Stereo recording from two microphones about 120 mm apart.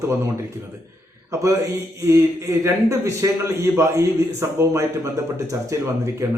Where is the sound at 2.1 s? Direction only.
25° right (ahead or behind).